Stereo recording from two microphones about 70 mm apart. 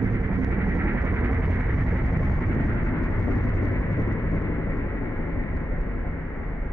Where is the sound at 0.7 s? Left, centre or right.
Right.